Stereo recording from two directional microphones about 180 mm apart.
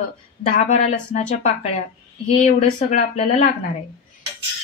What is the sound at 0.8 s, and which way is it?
Speech, 40° left (ahead or behind).